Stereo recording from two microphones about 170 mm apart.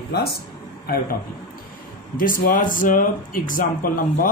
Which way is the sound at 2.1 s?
55° left (ahead or behind).